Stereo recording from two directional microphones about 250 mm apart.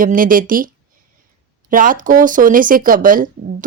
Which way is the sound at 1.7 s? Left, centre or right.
Right.